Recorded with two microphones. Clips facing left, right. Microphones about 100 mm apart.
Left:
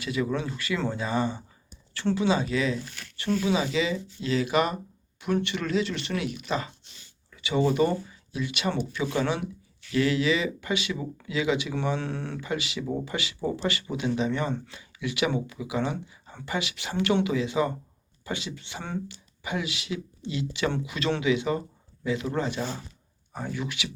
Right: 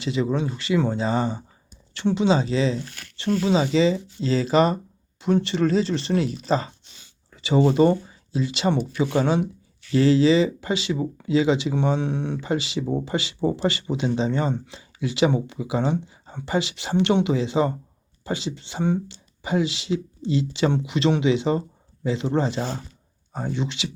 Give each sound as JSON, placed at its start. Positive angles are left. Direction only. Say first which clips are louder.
{"t": 0.0, "sound": "speech", "louder": "right 4 dB", "side_deg": -25}
{"t": 12.5, "sound": "speech", "louder": "right 5 dB", "side_deg": -30}